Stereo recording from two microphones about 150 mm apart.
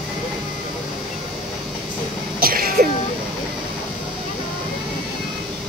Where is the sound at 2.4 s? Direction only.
75° right (ahead or behind).